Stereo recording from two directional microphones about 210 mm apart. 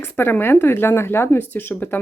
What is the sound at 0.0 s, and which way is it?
Speech, 10° left (ahead or behind).